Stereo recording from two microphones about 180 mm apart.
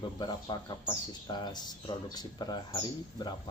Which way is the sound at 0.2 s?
25° left (ahead or behind).